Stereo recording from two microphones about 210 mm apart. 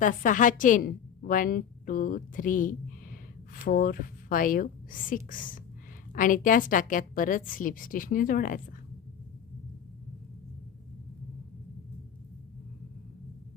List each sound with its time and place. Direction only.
0.0 s a woman's voice: 40° left (ahead or behind)